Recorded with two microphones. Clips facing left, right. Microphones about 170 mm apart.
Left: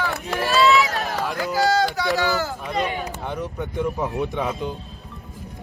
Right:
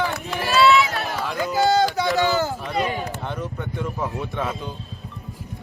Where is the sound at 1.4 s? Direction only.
20° right (ahead or behind).